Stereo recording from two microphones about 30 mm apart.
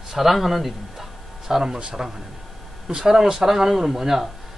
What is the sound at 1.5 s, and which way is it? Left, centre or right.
Speech, centre.